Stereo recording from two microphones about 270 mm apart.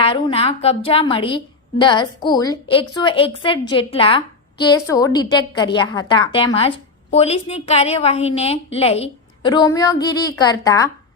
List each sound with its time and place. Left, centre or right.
0.0 s a woman's voice: centre